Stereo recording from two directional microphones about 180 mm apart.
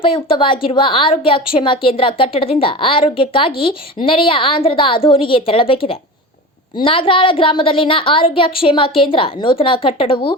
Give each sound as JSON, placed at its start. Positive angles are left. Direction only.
{"t": 0.0, "sound": "a woman's voice", "side_deg": 30}